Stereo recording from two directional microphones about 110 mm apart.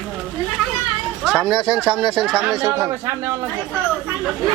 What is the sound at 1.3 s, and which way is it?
Speech, centre (ahead or behind).